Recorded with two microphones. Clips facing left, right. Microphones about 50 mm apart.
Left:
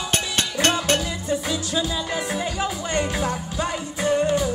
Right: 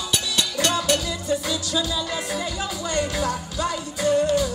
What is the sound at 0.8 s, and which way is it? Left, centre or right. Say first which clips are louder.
Music: even; left.